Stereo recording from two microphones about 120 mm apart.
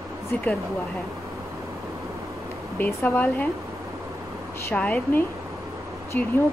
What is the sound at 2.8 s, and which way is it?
Speech, 15° left (ahead or behind).